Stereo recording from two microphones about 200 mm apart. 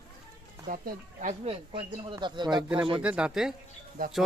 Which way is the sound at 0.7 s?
40° right (ahead or behind).